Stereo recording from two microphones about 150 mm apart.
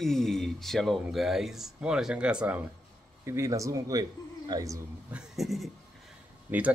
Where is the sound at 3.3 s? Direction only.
20° right (ahead or behind).